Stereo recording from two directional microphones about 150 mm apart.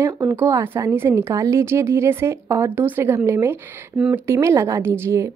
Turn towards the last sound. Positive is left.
turn(degrees=-15)  # may be behind; listen again after turning